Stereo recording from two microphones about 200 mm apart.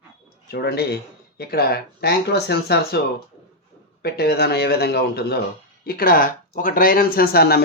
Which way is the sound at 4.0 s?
50° left (ahead or behind).